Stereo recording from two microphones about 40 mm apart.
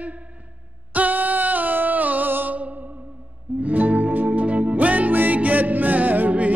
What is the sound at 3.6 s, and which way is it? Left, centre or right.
Music, right.